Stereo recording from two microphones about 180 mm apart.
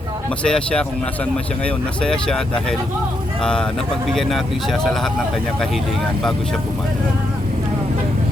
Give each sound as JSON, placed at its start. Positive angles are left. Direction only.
{"t": 0.4, "sound": "speech", "side_deg": 5}